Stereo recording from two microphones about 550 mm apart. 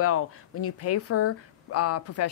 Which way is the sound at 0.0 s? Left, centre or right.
Left.